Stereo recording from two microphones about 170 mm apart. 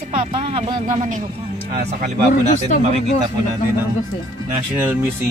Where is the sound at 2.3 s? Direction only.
45° left (ahead or behind).